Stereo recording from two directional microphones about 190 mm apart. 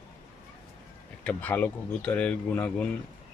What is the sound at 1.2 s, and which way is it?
Speech, 5° left (ahead or behind).